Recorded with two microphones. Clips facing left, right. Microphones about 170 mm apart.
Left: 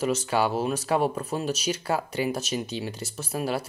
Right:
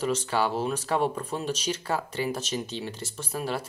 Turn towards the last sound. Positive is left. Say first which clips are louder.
# left 3 dB
turn(degrees=10)  # may be behind; listen again after turning